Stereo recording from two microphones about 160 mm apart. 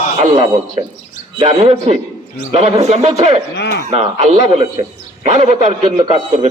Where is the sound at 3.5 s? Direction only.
85° left.